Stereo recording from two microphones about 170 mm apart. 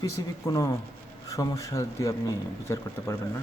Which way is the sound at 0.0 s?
20° left (ahead or behind).